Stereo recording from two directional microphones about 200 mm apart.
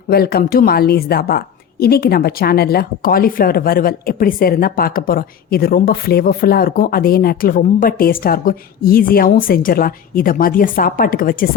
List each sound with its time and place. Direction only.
0.1 s a woman's voice: 50° left (ahead or behind)